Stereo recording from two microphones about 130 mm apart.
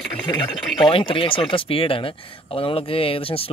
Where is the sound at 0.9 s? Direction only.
40° left (ahead or behind).